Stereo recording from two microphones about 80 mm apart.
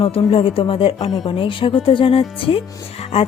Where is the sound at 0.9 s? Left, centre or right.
Left.